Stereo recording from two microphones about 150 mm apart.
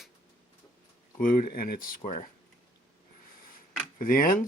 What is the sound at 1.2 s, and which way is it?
Speech, 70° left (ahead or behind).